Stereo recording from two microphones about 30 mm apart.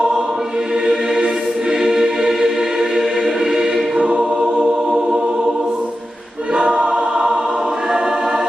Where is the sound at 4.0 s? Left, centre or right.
Right.